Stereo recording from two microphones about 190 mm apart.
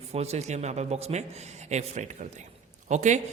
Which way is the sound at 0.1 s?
35° right (ahead or behind).